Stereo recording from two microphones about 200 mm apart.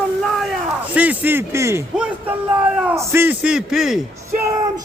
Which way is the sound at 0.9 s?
10° right (ahead or behind).